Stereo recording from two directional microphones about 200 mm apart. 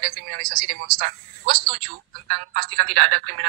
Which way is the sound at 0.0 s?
45° right (ahead or behind).